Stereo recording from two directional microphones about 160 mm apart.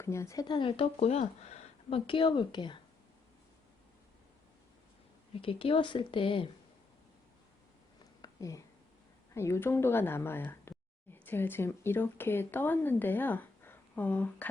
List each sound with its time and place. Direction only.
0.0 s speech: 15° left (ahead or behind)
5.4 s speech: 35° left (ahead or behind)
8.2 s a sound: 20° left (ahead or behind)
9.3 s speech: 15° left (ahead or behind)